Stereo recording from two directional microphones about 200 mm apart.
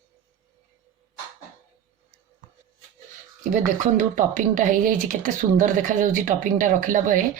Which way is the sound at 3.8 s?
40° right (ahead or behind).